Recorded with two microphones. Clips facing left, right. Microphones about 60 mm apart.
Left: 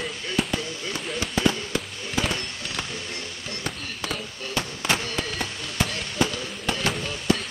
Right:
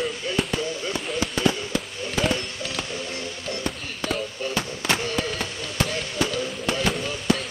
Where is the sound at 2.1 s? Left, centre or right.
Centre.